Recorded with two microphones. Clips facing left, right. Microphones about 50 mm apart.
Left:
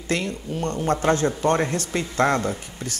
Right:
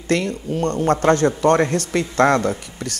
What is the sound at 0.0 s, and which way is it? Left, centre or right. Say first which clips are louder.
Speech: right 5 dB; right.